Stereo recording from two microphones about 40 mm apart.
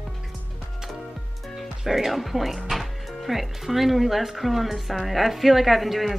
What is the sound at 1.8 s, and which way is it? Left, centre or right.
Speech, centre.